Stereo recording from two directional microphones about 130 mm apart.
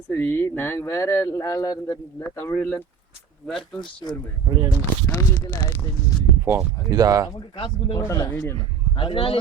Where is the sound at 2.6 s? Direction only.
10° left (ahead or behind).